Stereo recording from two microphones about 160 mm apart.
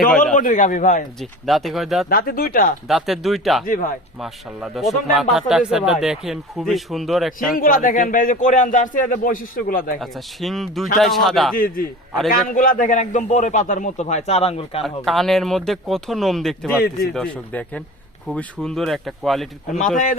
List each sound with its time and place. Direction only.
0.3 s a man's voice: 55° left (ahead or behind)
1.2 s speech: centre (ahead or behind)
2.0 s a man's voice: 65° left (ahead or behind)
2.8 s speech: centre (ahead or behind)
7.5 s a man's voice: 60° left (ahead or behind)
10.0 s speech: centre (ahead or behind)
11.5 s a man's voice: 65° left (ahead or behind); by 14.8 s 40° left (ahead or behind)
14.8 s speech: centre (ahead or behind)